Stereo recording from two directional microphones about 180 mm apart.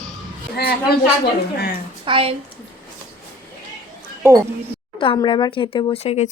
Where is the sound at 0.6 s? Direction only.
60° left (ahead or behind).